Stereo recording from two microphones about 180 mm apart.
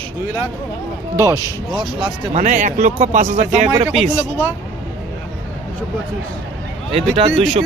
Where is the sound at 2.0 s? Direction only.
40° right (ahead or behind).